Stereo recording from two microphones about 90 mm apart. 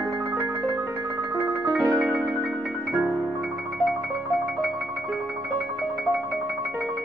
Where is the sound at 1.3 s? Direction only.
25° right (ahead or behind).